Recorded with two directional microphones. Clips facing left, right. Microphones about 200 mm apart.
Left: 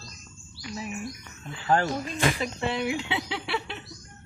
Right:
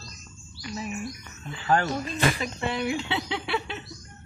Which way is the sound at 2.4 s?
25° left (ahead or behind).